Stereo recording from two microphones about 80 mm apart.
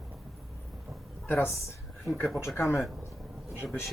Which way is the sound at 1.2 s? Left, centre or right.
Left.